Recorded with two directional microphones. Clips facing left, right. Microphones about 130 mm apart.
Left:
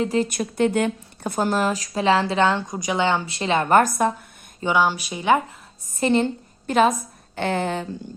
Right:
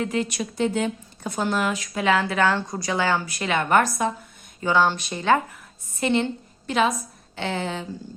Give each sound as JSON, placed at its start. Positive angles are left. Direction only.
{"t": 0.0, "sound": "speech", "side_deg": 35}
{"t": 0.3, "sound": "speech", "side_deg": 55}
{"t": 4.6, "sound": "a woman's voice", "side_deg": 15}
{"t": 6.0, "sound": "speech", "side_deg": 35}
{"t": 6.7, "sound": "speech", "side_deg": 45}